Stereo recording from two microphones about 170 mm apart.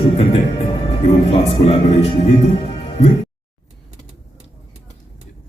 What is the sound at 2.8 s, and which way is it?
Music, 35° left (ahead or behind).